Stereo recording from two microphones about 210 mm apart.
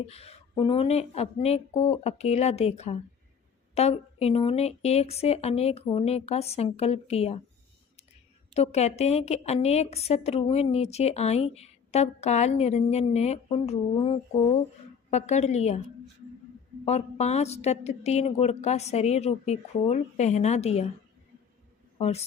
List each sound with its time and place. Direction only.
0.1 s speech: 30° left (ahead or behind)
8.5 s a woman's voice: 30° left (ahead or behind)
16.8 s a woman's voice: 30° left (ahead or behind)
21.9 s a man's voice: 30° left (ahead or behind)